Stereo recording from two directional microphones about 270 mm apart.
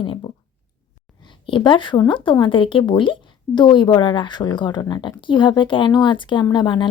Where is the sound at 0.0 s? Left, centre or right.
Left.